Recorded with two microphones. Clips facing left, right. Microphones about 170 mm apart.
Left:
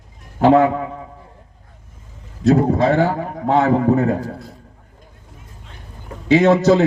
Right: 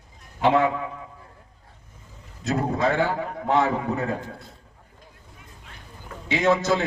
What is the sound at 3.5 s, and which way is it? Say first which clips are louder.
Speech: left 8 dB; 45° left (ahead or behind).